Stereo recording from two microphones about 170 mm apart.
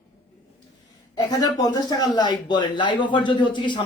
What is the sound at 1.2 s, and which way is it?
A man's voice, 25° left (ahead or behind).